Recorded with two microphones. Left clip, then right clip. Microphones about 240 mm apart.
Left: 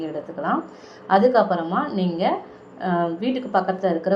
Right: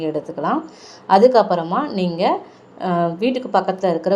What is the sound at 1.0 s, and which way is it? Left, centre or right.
A woman's voice, right.